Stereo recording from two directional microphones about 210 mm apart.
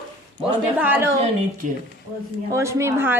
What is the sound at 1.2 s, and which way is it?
Speech, 40° right (ahead or behind).